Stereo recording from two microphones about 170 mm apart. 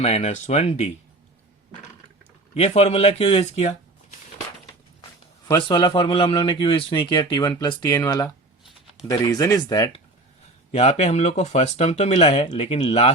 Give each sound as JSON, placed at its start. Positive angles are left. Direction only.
{"t": 0.0, "sound": "speech", "side_deg": 40}
{"t": 2.6, "sound": "speech", "side_deg": 40}
{"t": 5.5, "sound": "a man's voice", "side_deg": 30}
{"t": 10.7, "sound": "speech", "side_deg": 40}